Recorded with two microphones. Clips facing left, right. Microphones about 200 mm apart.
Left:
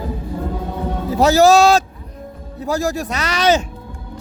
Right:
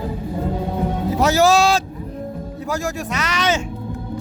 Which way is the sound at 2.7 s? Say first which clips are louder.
Left 5 dB; 35° left (ahead or behind).